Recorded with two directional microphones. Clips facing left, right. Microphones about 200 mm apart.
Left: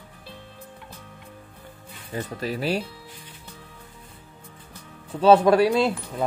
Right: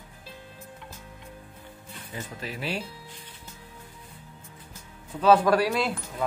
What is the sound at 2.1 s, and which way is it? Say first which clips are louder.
Speech: left 8 dB; 40° left (ahead or behind).